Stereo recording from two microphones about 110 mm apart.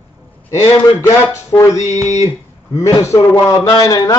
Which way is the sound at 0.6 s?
25° left (ahead or behind).